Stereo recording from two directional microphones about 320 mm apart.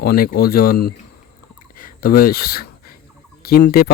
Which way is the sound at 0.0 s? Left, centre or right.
Left.